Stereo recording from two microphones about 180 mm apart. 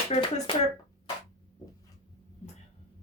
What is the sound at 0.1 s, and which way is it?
Speech, 30° left (ahead or behind).